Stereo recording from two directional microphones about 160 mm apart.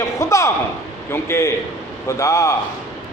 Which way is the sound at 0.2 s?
20° left (ahead or behind).